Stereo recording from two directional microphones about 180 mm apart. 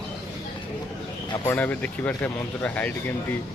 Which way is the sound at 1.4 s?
10° left (ahead or behind).